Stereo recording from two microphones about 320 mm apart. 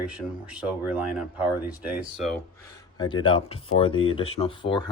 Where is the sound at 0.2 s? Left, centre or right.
Centre.